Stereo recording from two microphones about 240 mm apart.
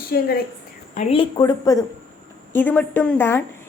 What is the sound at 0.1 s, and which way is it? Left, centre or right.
Speech, left.